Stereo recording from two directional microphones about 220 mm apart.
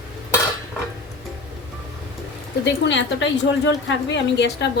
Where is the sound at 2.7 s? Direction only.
55° left (ahead or behind).